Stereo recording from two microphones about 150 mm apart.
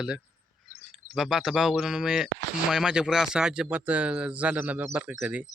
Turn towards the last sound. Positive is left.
turn(degrees=-10)  # may be behind; listen again after turning